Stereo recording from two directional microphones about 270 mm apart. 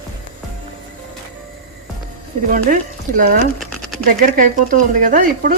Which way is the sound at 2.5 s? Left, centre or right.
Right.